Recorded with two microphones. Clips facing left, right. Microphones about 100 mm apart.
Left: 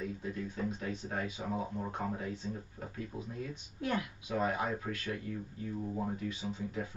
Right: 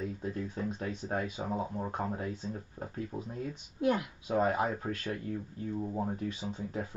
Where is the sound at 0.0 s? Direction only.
35° right (ahead or behind).